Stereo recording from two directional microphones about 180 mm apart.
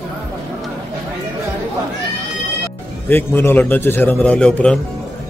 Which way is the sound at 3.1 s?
10° left (ahead or behind).